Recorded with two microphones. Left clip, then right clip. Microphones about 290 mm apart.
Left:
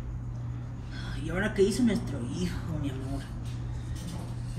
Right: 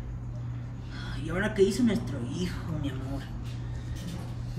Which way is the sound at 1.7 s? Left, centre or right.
Right.